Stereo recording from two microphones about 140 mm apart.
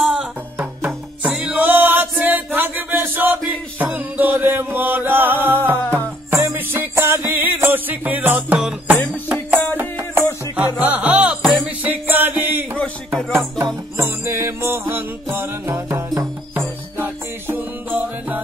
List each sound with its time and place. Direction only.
0.0 s music: 5° right (ahead or behind)
13.9 s music: 20° right (ahead or behind)